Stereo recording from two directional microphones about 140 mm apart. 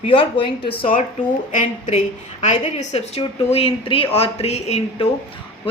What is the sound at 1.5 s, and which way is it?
A woman's voice, 65° left (ahead or behind).